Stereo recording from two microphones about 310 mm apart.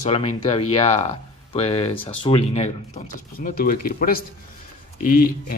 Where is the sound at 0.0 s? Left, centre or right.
Centre.